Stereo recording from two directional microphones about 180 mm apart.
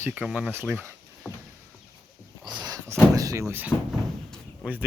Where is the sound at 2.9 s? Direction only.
15° right (ahead or behind).